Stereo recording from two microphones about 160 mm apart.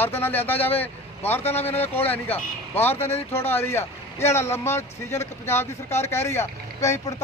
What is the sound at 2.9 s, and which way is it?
Speech, 40° left (ahead or behind).